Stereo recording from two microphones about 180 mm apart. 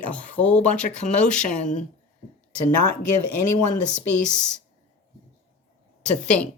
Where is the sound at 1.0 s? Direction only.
40° left (ahead or behind).